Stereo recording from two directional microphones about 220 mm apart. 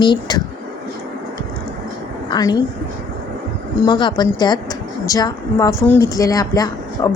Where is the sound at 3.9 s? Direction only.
20° left (ahead or behind).